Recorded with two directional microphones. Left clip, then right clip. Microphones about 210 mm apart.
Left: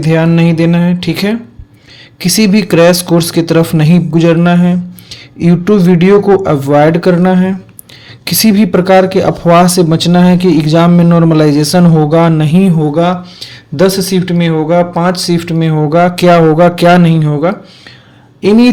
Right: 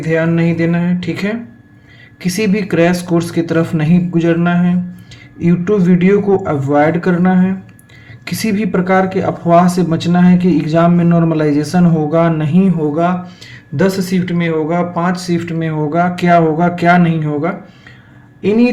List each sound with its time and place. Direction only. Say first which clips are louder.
0.0 s speech: left 4 dB; 45° left (ahead or behind)